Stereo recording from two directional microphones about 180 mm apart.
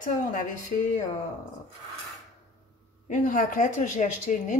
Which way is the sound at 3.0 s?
45° left (ahead or behind).